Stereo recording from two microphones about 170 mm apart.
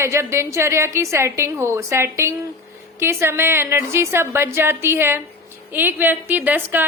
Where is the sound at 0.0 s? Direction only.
15° right (ahead or behind).